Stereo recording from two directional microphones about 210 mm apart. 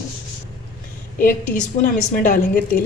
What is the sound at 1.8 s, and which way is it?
Speech, 40° left (ahead or behind).